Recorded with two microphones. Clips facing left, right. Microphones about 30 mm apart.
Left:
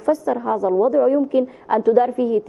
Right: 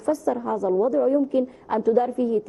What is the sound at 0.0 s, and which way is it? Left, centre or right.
A man's voice, left.